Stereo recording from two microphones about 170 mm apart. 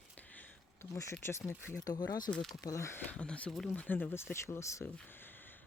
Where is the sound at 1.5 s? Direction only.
15° left (ahead or behind).